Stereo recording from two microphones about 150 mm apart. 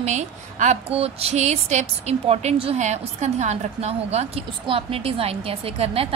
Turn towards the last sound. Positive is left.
turn(degrees=-40)  # may be behind; listen again after turning